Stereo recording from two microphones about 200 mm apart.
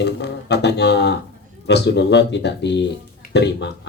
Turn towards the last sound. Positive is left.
turn(degrees=60)  # may be behind; listen again after turning